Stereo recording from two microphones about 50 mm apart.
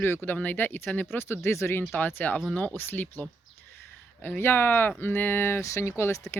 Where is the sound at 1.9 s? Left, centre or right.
Left.